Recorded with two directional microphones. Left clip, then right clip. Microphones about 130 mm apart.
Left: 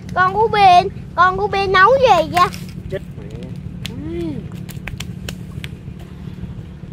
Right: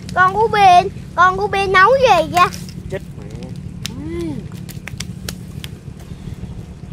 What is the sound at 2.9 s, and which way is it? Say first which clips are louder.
Vehicle: even; 40° right (ahead or behind).